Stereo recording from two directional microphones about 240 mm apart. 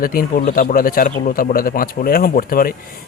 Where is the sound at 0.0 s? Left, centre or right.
Left.